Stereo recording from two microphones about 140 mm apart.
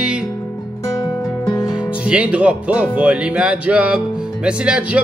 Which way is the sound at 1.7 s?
5° right (ahead or behind).